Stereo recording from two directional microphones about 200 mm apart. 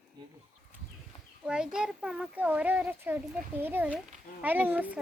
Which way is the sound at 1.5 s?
5° right (ahead or behind).